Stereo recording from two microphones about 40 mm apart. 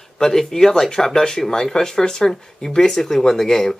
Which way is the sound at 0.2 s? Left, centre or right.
Centre.